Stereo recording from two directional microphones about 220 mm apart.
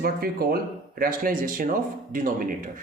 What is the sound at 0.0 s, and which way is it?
Speech, 40° right (ahead or behind).